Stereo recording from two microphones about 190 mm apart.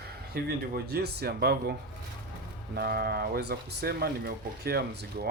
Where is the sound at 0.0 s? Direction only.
55° right (ahead or behind).